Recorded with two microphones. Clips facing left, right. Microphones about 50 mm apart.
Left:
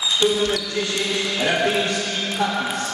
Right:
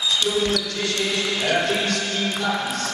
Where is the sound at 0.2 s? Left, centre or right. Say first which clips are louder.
Left 5 dB; left.